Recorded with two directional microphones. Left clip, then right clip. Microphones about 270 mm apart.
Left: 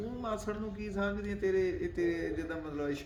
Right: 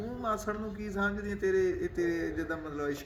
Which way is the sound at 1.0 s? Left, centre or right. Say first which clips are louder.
Right 2 dB; centre.